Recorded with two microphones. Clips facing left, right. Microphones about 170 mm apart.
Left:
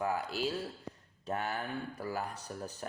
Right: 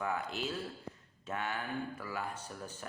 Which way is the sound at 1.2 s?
35° left (ahead or behind).